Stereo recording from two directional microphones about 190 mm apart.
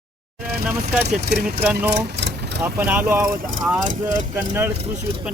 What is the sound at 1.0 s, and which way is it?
Speech, 60° right (ahead or behind).